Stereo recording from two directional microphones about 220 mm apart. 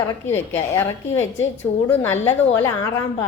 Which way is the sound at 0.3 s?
30° left (ahead or behind).